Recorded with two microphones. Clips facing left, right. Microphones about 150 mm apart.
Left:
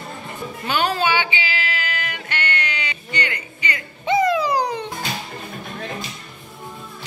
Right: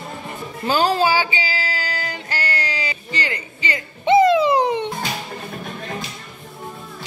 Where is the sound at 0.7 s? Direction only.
35° right (ahead or behind).